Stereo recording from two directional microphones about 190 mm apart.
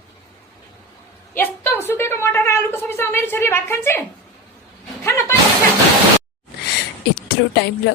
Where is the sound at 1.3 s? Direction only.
10° left (ahead or behind).